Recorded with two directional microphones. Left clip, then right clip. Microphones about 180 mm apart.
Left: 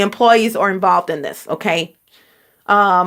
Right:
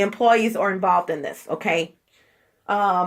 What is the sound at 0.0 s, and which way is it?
Speech, 45° left (ahead or behind).